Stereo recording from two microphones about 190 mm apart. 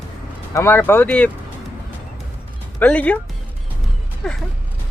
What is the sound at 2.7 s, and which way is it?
Speech, 10° left (ahead or behind).